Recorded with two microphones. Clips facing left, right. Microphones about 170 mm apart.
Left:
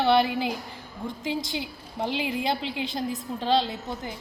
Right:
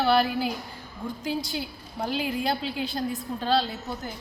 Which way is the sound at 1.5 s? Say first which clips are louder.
Left 1 dB; 20° left (ahead or behind).